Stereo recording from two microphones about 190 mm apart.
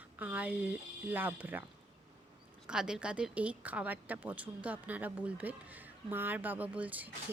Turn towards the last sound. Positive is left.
turn(degrees=-10)  # may be behind; listen again after turning